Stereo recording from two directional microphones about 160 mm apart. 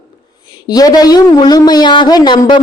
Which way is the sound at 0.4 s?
25° left (ahead or behind).